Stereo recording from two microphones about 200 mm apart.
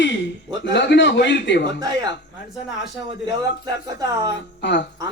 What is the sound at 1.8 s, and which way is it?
Speech, 20° right (ahead or behind).